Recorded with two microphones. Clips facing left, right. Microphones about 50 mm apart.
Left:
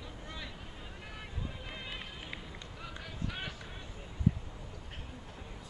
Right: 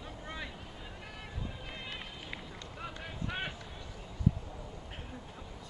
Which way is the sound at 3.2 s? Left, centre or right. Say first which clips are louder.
Right 3 dB; right.